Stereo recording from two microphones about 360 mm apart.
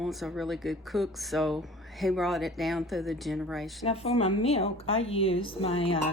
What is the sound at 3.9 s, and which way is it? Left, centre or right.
Dishes, centre.